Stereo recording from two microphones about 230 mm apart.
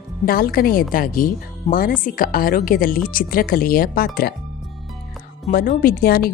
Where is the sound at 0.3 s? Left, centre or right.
Left.